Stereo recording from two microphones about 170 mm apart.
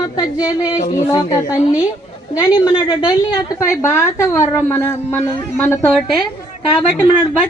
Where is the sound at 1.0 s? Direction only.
20° left (ahead or behind).